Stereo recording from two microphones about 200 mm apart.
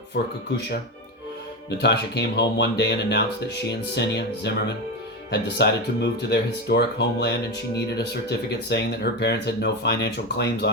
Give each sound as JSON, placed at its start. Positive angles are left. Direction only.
{"t": 0.1, "sound": "speech", "side_deg": 55}
{"t": 1.8, "sound": "speech", "side_deg": 60}